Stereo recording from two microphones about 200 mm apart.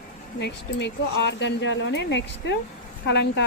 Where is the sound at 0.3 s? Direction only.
60° left (ahead or behind).